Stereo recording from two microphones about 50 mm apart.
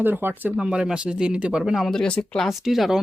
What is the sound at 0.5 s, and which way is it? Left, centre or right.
Speech, centre.